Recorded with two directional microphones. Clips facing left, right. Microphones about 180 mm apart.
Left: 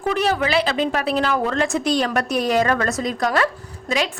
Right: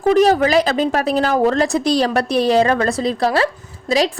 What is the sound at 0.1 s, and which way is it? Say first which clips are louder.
Speech: right 7 dB; 40° right (ahead or behind).